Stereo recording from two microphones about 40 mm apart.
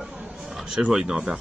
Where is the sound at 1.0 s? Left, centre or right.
Right.